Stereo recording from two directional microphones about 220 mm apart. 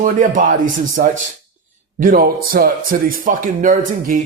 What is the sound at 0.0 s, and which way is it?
Speech, 35° right (ahead or behind).